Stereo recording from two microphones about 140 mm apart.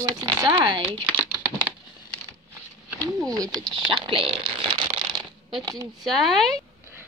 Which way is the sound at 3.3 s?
25° right (ahead or behind).